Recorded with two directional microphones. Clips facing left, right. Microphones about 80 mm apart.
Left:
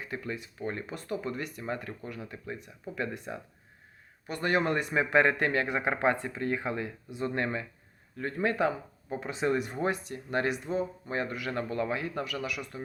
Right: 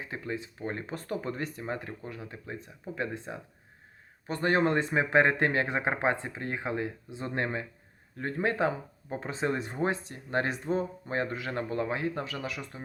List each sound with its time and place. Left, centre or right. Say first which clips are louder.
0.0 s speech: right 1 dB; right